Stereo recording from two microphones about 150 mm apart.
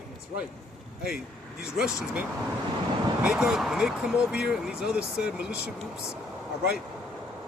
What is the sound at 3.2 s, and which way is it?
Speech, 5° right (ahead or behind).